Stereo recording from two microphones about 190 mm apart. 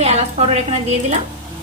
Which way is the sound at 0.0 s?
35° right (ahead or behind).